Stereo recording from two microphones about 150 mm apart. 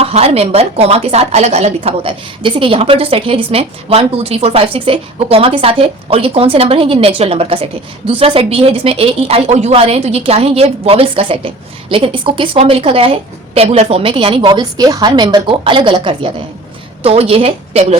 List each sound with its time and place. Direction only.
0.0 s a woman's voice: 45° right (ahead or behind)